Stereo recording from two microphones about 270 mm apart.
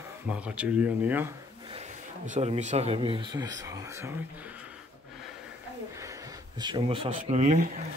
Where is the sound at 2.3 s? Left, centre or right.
Right.